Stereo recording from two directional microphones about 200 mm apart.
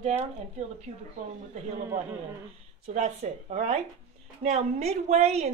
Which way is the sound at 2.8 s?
35° right (ahead or behind).